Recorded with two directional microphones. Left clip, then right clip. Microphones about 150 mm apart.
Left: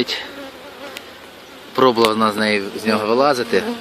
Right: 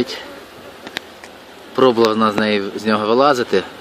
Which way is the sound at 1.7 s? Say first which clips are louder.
Right 1 dB; 5° right (ahead or behind).